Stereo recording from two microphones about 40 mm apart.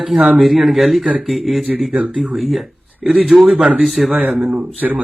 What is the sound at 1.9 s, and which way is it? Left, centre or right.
Speech, right.